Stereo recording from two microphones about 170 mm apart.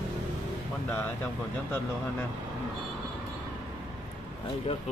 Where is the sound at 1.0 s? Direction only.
10° left (ahead or behind).